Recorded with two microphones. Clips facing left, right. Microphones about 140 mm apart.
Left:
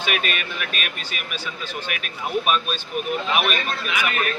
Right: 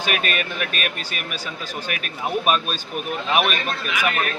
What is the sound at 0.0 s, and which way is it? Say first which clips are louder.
Speech: right 2 dB; 40° right (ahead or behind).